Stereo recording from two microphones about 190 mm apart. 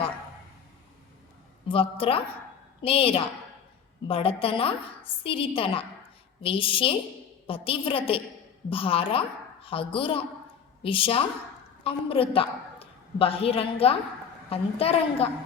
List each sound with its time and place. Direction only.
1.6 s a woman's voice: 30° left (ahead or behind)